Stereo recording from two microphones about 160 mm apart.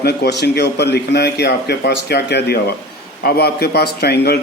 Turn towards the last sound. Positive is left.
turn(degrees=80)